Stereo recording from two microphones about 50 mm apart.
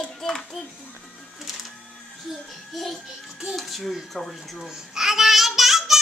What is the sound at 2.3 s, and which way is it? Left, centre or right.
A child's voice, centre.